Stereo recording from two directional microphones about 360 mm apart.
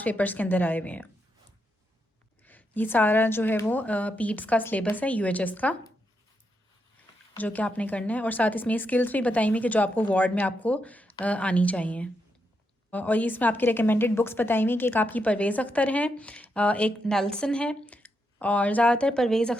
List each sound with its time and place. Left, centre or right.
0.0 s a woman's voice: centre
2.4 s a woman's voice: centre
7.3 s a woman's voice: centre